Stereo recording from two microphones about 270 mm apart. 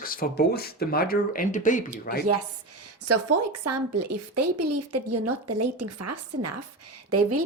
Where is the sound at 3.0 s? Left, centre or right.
Right.